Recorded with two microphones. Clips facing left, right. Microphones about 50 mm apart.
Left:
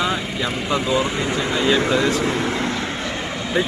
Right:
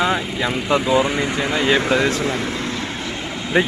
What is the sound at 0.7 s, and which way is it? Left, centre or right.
Speech, centre.